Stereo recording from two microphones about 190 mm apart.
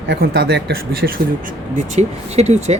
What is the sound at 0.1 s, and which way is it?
Speech, 60° right (ahead or behind).